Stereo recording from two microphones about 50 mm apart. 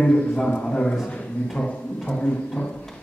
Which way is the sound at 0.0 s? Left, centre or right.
Left.